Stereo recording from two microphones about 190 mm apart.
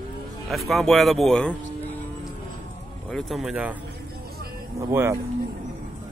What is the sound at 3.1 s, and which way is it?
Speech, centre (ahead or behind).